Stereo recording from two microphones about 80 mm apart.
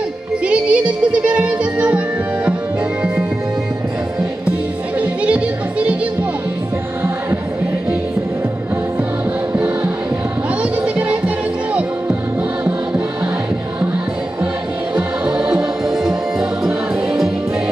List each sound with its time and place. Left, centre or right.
0.5 s music: centre
5.0 s music: centre
10.6 s music: centre
15.0 s music: centre